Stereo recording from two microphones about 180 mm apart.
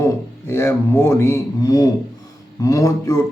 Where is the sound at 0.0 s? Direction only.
15° left (ahead or behind).